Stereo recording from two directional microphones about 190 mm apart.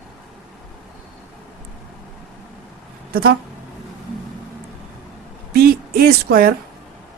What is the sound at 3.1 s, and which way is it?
Speech, 55° right (ahead or behind).